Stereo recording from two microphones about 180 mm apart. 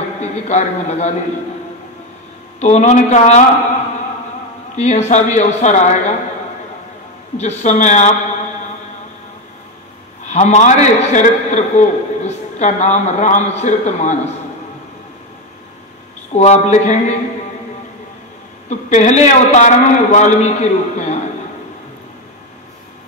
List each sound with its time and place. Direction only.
0.2 s a man's voice: 40° left (ahead or behind)
2.6 s a man's voice: 40° left (ahead or behind)
4.7 s a man's voice: 40° left (ahead or behind)
7.3 s a man's voice: 40° left (ahead or behind)
10.2 s a man's voice: 40° left (ahead or behind)
16.3 s a man's voice: 35° left (ahead or behind)
18.7 s a man's voice: 40° left (ahead or behind)